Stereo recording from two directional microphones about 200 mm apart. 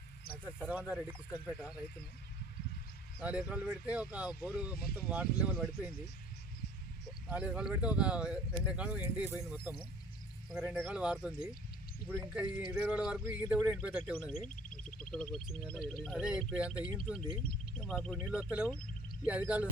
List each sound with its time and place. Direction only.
0.3 s snake: 50° left (ahead or behind)
0.6 s speech: 5° right (ahead or behind)
3.2 s speech: 5° right (ahead or behind)
7.3 s speech: 5° right (ahead or behind)
14.4 s a sound: 5° left (ahead or behind)
15.5 s speech: 5° left (ahead or behind)
16.8 s speech: 25° right (ahead or behind)
17.4 s speech: 5° left (ahead or behind)